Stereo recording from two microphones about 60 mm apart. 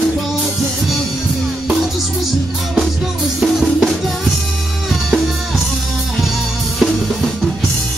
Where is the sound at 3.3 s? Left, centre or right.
Centre.